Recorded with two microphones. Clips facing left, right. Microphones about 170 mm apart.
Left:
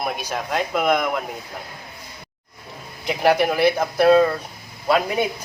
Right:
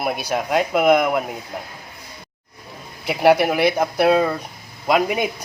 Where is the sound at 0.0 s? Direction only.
10° right (ahead or behind).